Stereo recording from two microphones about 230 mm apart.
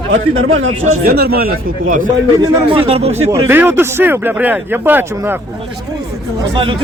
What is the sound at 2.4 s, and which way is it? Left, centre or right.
Speech, right.